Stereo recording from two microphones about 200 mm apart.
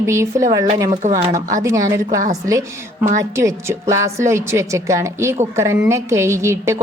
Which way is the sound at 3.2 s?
15° right (ahead or behind).